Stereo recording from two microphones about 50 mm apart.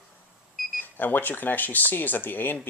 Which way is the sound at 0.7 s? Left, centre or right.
Left.